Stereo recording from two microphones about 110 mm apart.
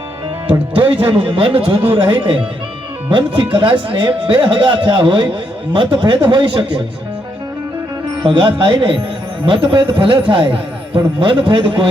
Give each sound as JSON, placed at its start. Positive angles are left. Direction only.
{"t": 1.0, "sound": "a man's voice", "side_deg": -50}
{"t": 8.2, "sound": "a man's voice", "side_deg": -50}